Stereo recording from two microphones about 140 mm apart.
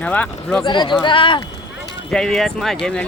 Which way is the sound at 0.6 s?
35° left (ahead or behind).